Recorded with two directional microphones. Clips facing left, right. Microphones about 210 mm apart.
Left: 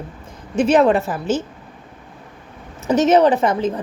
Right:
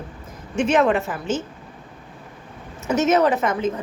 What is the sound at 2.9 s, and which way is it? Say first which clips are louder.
Speech: left 4 dB; 30° left (ahead or behind).